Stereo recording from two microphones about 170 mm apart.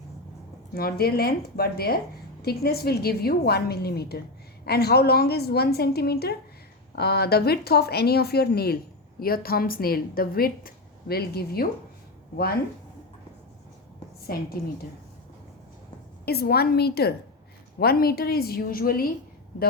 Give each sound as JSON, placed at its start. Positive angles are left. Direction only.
{"t": 0.7, "sound": "a woman's voice", "side_deg": 65}
{"t": 16.2, "sound": "a woman's voice", "side_deg": 65}